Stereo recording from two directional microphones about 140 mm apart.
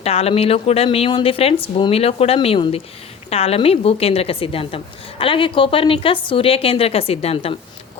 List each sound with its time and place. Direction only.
0.0 s a woman's voice: 45° left (ahead or behind)